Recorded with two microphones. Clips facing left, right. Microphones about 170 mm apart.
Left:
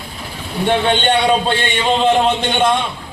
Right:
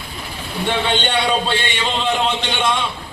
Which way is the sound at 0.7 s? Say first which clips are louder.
Left 5 dB; 50° left (ahead or behind).